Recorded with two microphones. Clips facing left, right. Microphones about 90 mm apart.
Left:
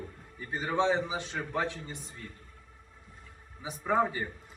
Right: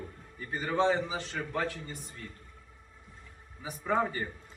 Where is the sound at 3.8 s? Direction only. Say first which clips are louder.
Left 2 dB; 10° left (ahead or behind).